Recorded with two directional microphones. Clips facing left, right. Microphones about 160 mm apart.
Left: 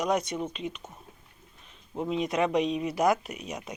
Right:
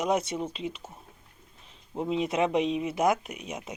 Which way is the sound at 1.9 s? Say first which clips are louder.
Right 1 dB; 20° right (ahead or behind).